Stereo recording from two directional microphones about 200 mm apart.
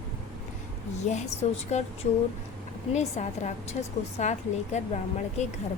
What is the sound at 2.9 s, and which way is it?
Speech, 35° left (ahead or behind).